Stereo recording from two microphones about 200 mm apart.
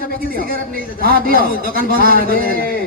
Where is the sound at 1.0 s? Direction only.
50° right (ahead or behind).